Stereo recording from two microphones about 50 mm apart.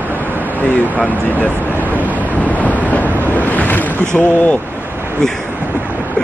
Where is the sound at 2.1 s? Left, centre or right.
Left.